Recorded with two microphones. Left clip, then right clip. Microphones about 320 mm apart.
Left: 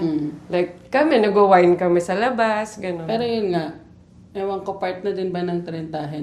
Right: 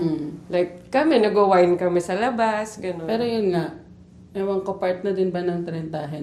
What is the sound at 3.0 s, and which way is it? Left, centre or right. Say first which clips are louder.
Speech: even; right.